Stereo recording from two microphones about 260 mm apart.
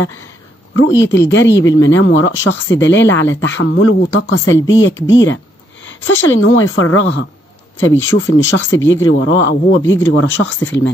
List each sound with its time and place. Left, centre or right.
0.7 s speech: left
1.0 s speech: centre
1.3 s speech: left